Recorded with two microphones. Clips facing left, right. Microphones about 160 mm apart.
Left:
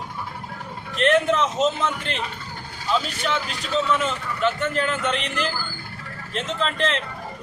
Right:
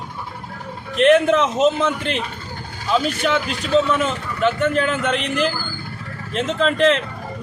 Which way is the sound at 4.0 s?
55° right (ahead or behind).